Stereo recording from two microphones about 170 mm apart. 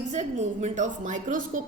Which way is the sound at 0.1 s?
45° right (ahead or behind).